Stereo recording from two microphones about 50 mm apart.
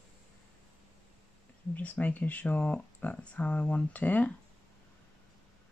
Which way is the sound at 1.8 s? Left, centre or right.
Left.